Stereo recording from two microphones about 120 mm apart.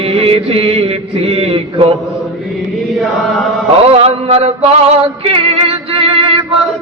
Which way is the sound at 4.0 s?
55° right (ahead or behind).